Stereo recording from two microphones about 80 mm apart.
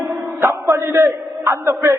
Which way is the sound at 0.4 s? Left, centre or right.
Right.